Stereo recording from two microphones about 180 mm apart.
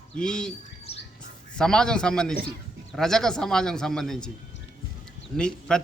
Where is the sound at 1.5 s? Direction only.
5° left (ahead or behind).